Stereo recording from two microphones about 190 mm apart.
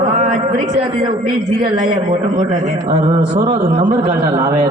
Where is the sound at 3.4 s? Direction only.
25° right (ahead or behind).